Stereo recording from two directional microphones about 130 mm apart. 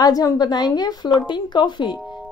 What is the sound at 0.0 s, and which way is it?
Speech, 30° left (ahead or behind).